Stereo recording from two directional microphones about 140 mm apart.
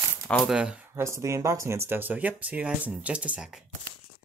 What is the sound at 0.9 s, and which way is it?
Speech, 20° right (ahead or behind).